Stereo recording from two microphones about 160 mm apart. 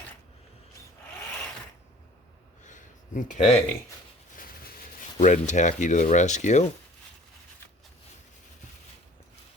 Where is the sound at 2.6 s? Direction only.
50° left (ahead or behind).